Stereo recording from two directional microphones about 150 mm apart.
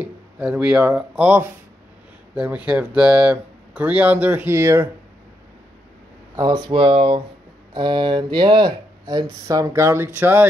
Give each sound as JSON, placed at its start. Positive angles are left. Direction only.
{"t": 0.0, "sound": "speech", "side_deg": -5}
{"t": 6.3, "sound": "speech", "side_deg": -25}